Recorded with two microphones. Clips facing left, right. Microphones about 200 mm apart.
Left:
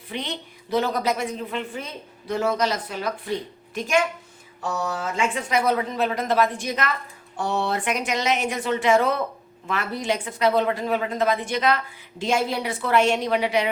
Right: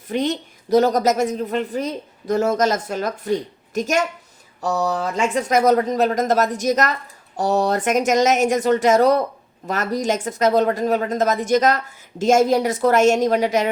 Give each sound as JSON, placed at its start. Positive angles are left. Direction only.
{"t": 0.1, "sound": "a woman's voice", "side_deg": -45}